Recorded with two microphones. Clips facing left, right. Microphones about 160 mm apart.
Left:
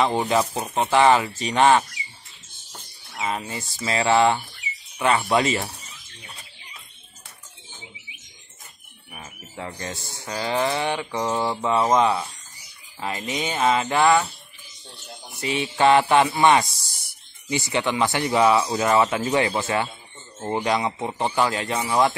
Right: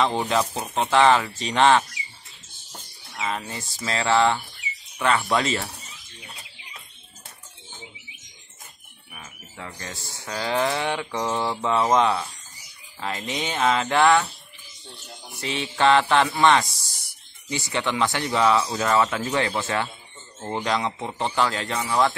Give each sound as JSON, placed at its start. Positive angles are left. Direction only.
{"t": 0.0, "sound": "speech", "side_deg": 10}
{"t": 3.2, "sound": "speech", "side_deg": 10}
{"t": 9.1, "sound": "bird", "side_deg": 30}
{"t": 10.2, "sound": "mantra", "side_deg": 5}
{"t": 13.0, "sound": "speech", "side_deg": 5}
{"t": 15.4, "sound": "speech", "side_deg": 10}